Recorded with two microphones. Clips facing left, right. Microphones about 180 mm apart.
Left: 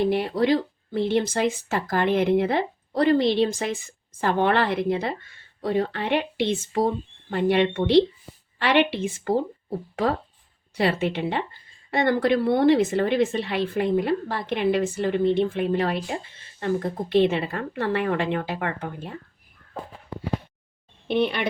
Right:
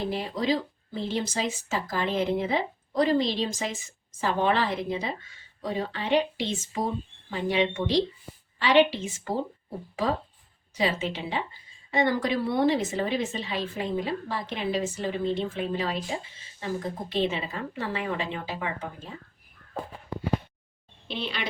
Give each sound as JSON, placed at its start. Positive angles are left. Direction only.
{"t": 0.0, "sound": "speech", "side_deg": 65}
{"t": 21.1, "sound": "speech", "side_deg": 55}